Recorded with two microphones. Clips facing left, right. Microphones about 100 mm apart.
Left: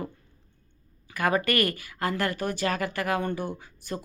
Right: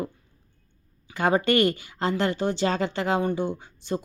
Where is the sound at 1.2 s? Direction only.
25° right (ahead or behind).